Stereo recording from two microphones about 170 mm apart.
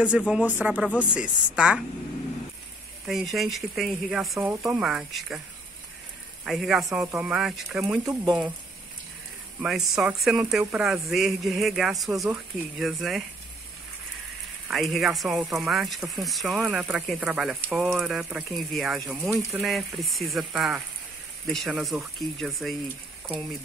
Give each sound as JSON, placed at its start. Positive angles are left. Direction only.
{"t": 0.2, "sound": "speech", "side_deg": -5}
{"t": 3.1, "sound": "speech", "side_deg": 0}
{"t": 4.4, "sound": "speech", "side_deg": -10}
{"t": 6.4, "sound": "speech", "side_deg": 0}
{"t": 8.0, "sound": "speech", "side_deg": -20}
{"t": 9.6, "sound": "speech", "side_deg": 0}
{"t": 14.7, "sound": "speech", "side_deg": 0}